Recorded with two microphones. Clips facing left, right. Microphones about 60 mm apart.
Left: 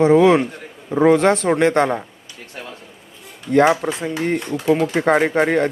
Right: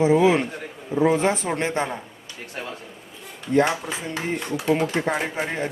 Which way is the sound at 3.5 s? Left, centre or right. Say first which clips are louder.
Left 6 dB; left.